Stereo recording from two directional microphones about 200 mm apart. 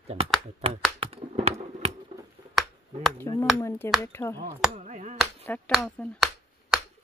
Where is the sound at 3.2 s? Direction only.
15° left (ahead or behind).